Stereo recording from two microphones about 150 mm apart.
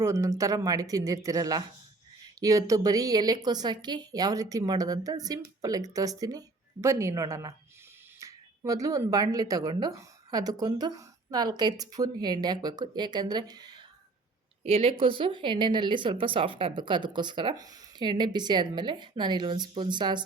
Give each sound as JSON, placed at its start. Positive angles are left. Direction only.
{"t": 0.0, "sound": "speech", "side_deg": -20}
{"t": 14.6, "sound": "speech", "side_deg": -40}